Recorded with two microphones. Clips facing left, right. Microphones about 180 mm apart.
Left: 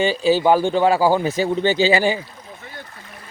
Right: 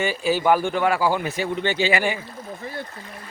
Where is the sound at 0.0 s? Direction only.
30° left (ahead or behind).